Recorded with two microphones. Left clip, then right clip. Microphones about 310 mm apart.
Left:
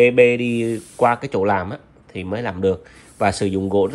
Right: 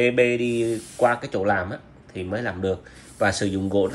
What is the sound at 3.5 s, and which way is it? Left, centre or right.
Speech, left.